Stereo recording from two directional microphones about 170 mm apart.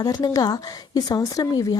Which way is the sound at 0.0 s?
20° left (ahead or behind).